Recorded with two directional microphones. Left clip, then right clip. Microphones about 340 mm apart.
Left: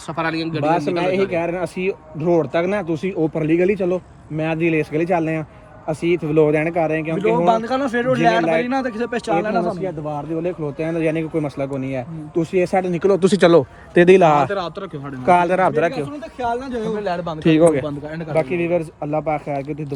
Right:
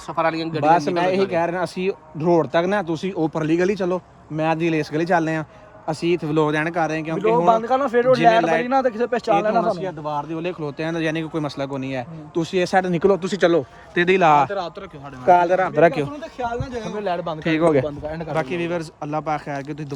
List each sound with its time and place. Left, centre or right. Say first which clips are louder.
0.2 s a man's voice: right 1 dB; right
0.9 s speech: even; centre
6.7 s speech: left 3 dB; right
7.2 s a man's voice: right 1 dB; centre
10.3 s speech: left 3 dB; centre
13.1 s a man's voice: left 5 dB; centre
15.7 s a man's voice: right 3 dB; right
17.4 s a man's voice: left 4 dB; centre